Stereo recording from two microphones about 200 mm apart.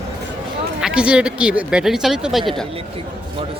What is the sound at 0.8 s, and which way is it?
Speech, 5° right (ahead or behind).